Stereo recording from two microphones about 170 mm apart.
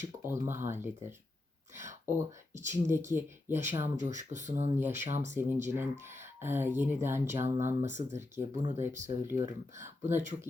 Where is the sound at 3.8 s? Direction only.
45° right (ahead or behind).